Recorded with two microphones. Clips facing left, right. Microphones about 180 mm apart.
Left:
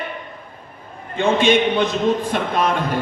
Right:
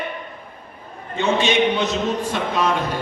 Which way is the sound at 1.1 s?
50° left (ahead or behind).